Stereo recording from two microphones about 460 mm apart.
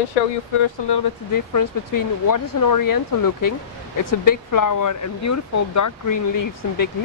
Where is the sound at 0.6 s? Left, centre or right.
Left.